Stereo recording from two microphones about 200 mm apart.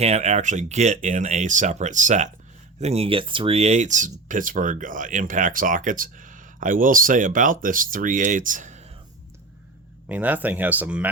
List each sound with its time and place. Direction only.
0.0 s speech: 35° right (ahead or behind)
10.1 s speech: 10° right (ahead or behind)